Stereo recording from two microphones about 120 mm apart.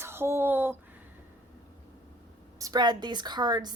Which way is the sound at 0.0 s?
20° right (ahead or behind).